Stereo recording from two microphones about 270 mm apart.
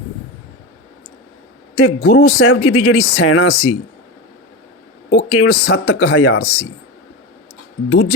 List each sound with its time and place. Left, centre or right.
1.7 s speech: left
5.1 s speech: left
7.9 s speech: left